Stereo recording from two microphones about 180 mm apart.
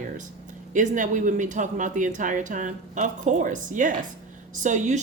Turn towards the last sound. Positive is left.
turn(degrees=-45)  # may be behind; listen again after turning